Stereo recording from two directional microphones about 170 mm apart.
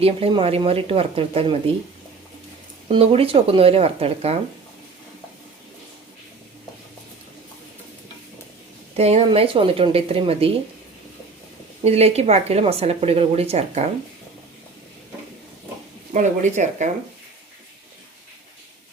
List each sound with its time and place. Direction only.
0.0 s speech: 35° right (ahead or behind)
2.9 s speech: 35° right (ahead or behind)
9.0 s speech: 35° right (ahead or behind)
11.8 s speech: 40° right (ahead or behind)
16.1 s speech: 45° right (ahead or behind)